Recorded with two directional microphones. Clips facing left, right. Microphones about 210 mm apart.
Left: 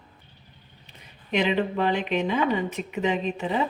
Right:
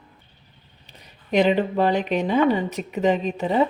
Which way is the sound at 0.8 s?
40° right (ahead or behind).